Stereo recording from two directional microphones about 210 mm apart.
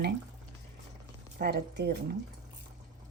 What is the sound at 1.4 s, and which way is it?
Speech, 50° right (ahead or behind).